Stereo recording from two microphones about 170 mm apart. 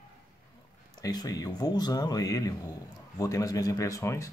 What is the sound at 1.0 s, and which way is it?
Speech, 20° left (ahead or behind).